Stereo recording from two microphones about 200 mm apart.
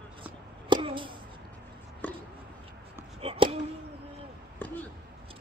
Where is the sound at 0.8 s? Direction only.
25° right (ahead or behind).